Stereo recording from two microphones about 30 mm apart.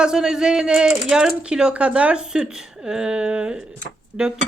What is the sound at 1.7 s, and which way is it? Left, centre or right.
Speech, right.